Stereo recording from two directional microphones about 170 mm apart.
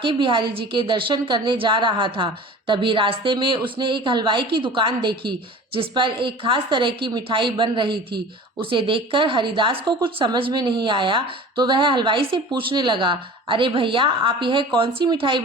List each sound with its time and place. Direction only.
0.0 s speech: 30° right (ahead or behind)